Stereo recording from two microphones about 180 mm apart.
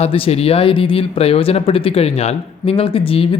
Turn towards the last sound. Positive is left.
turn(degrees=30)  # may be behind; listen again after turning